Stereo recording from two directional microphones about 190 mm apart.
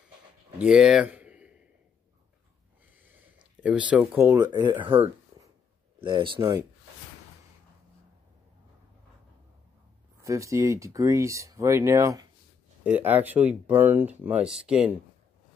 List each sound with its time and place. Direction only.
0.6 s speech: 5° right (ahead or behind)
3.6 s speech: 5° right (ahead or behind)
4.8 s speech: 25° right (ahead or behind)
10.2 s speech: 15° right (ahead or behind)